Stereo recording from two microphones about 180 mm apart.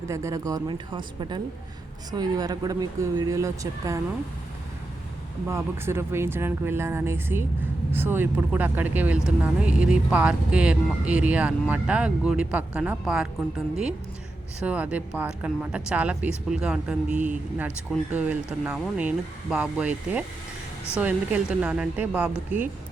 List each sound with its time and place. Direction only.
0.1 s speech: 15° right (ahead or behind)
5.5 s speech: 15° right (ahead or behind)
14.6 s speech: 5° right (ahead or behind)
17.2 s speech: 45° right (ahead or behind)
18.1 s speech: 5° right (ahead or behind)